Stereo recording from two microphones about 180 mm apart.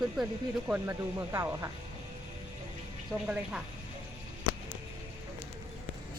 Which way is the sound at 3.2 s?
5° right (ahead or behind).